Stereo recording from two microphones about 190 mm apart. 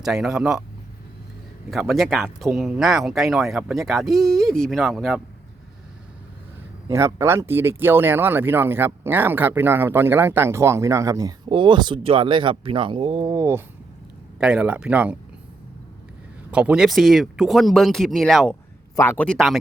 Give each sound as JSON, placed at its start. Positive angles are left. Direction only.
{"t": 0.0, "sound": "speech", "side_deg": 0}
{"t": 1.7, "sound": "speech", "side_deg": 0}
{"t": 6.8, "sound": "speech", "side_deg": -15}
{"t": 16.5, "sound": "speech", "side_deg": -5}